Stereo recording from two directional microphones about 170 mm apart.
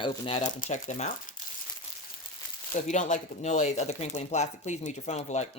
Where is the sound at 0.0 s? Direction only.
35° left (ahead or behind).